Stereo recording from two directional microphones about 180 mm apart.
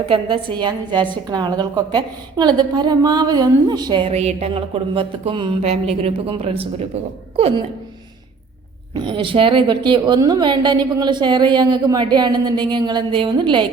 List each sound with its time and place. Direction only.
0.1 s a woman's voice: 30° right (ahead or behind)
9.0 s a woman's voice: 25° right (ahead or behind)